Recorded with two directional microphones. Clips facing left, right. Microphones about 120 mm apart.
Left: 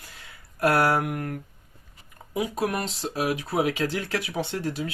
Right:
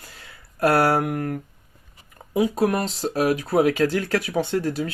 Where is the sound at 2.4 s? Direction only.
35° right (ahead or behind).